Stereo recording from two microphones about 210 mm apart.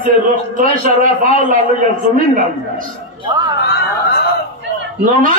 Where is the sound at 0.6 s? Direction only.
40° right (ahead or behind).